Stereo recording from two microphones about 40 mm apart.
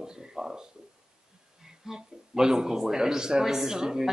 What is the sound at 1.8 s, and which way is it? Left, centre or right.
Speech, centre.